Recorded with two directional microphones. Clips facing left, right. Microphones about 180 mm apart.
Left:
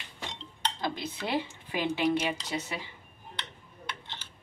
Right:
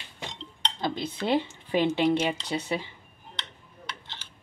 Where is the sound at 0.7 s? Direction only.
25° right (ahead or behind).